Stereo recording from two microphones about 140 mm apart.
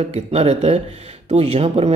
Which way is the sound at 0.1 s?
45° right (ahead or behind).